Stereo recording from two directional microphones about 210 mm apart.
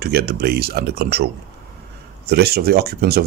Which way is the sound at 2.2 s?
50° right (ahead or behind).